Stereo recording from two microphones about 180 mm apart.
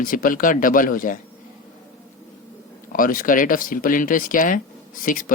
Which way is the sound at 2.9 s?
50° left (ahead or behind).